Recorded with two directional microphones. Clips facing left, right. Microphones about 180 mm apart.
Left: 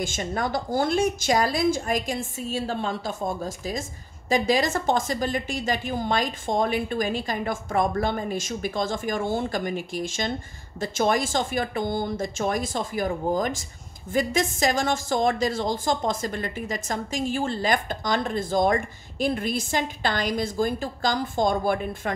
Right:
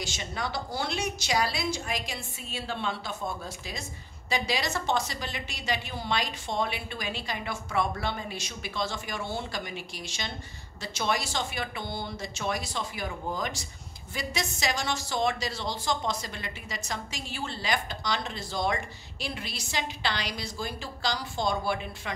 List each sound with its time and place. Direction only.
0.0 s speech: 50° left (ahead or behind)